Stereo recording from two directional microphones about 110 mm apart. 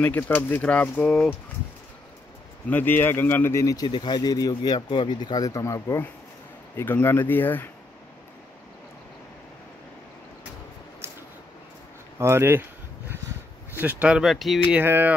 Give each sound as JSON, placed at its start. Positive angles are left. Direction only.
{"t": 0.0, "sound": "speech", "side_deg": 15}
{"t": 2.7, "sound": "speech", "side_deg": 20}
{"t": 11.0, "sound": "a sound", "side_deg": -20}
{"t": 12.2, "sound": "speech", "side_deg": -25}
{"t": 13.7, "sound": "speech", "side_deg": -15}
{"t": 14.7, "sound": "speech", "side_deg": -20}